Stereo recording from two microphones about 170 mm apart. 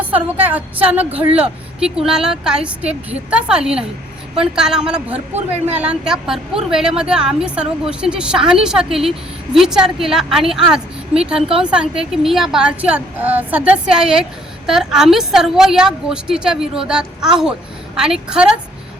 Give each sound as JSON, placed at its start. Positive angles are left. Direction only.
{"t": 0.0, "sound": "a woman's voice", "side_deg": -10}